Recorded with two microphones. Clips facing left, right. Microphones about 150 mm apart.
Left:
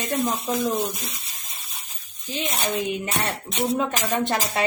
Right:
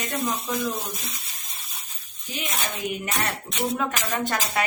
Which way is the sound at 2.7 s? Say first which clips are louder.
Left 4 dB; 30° left (ahead or behind).